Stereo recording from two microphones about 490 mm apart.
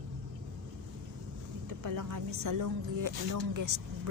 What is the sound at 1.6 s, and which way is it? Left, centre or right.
A woman's voice, right.